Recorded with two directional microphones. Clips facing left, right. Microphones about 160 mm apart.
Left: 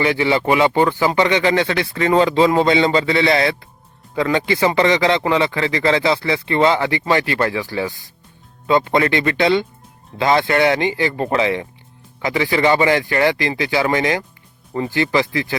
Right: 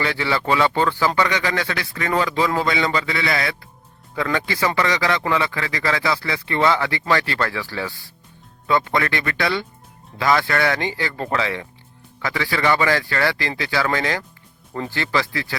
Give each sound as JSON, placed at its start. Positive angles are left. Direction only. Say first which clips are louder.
{"t": 0.0, "sound": "a man's voice", "louder": "left 6 dB", "side_deg": 15}